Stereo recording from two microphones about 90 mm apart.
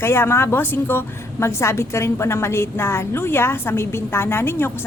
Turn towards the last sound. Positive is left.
turn(degrees=25)  # may be behind; listen again after turning